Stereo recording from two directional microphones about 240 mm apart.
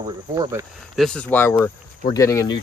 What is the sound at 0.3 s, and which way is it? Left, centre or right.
Speech, centre.